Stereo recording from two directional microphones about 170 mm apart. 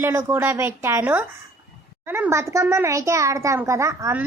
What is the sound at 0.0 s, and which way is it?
A child's voice, 15° right (ahead or behind).